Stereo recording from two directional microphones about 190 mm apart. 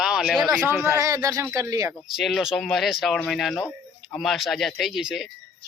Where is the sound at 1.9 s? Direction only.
Centre (ahead or behind).